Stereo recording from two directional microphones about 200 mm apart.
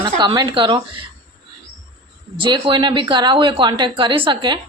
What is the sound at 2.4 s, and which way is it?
A woman's voice, 25° right (ahead or behind).